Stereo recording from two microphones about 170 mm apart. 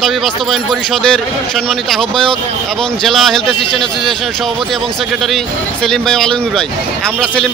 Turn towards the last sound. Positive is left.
turn(degrees=5)  # may be behind; listen again after turning